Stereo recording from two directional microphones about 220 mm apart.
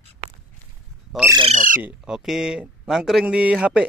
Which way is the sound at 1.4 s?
35° right (ahead or behind).